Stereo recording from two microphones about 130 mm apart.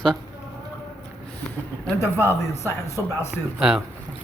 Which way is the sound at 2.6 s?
20° left (ahead or behind).